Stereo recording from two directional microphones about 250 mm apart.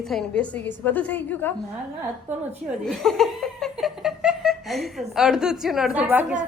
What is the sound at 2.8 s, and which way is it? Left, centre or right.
Laughter, centre.